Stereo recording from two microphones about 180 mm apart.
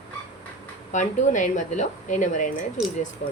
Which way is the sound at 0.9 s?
45° left (ahead or behind).